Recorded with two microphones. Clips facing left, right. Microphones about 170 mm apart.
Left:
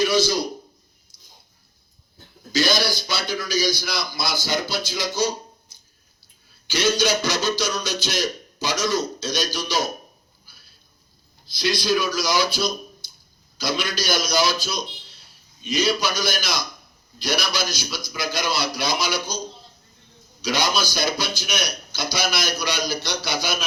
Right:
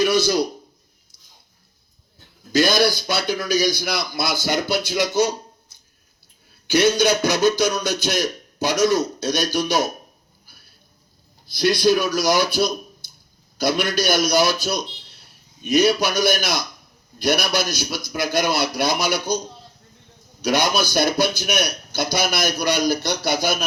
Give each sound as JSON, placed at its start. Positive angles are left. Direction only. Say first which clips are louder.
{"t": 0.0, "sound": "speech", "louder": "right 2 dB", "side_deg": -55}
{"t": 2.5, "sound": "a man's voice", "louder": "right 4 dB", "side_deg": -55}
{"t": 6.7, "sound": "a man's voice", "louder": "right 4 dB", "side_deg": -55}
{"t": 10.4, "sound": "a sound", "louder": "right 2 dB", "side_deg": -55}
{"t": 11.5, "sound": "a man's voice", "louder": "right 5 dB", "side_deg": -55}
{"t": 20.4, "sound": "a man's voice", "louder": "right 4 dB", "side_deg": -55}